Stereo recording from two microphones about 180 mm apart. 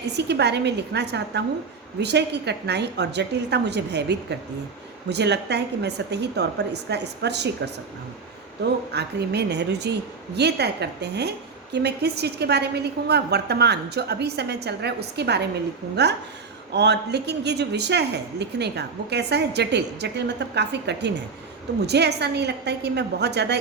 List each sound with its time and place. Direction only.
0.1 s a woman's voice: 70° right (ahead or behind)
8.9 s a woman's voice: 65° right (ahead or behind)